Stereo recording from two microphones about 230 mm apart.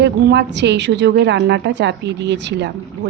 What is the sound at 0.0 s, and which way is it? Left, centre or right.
A woman's voice, right.